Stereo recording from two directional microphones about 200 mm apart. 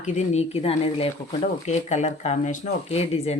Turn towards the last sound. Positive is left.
turn(degrees=30)  # may be behind; listen again after turning